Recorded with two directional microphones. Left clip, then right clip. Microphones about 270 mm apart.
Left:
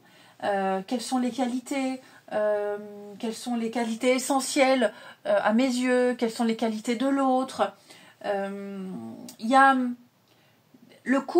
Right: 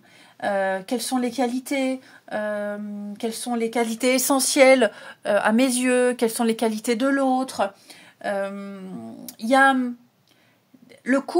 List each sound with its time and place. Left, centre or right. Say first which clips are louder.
0.4 s speech: right 3 dB; right
8.2 s a sound: right 3 dB; right
9.5 s speech: right 2 dB; right